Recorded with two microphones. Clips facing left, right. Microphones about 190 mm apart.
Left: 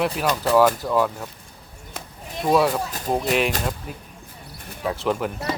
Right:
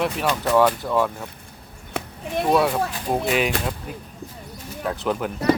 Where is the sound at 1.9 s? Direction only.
65° right (ahead or behind).